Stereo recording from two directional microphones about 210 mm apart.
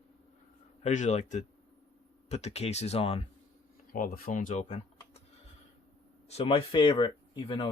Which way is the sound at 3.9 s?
45° left (ahead or behind).